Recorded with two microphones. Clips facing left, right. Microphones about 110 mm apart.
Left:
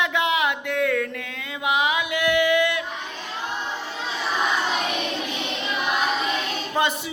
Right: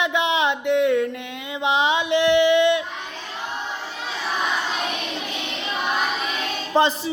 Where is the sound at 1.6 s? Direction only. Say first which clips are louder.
Right 2 dB; 30° right (ahead or behind).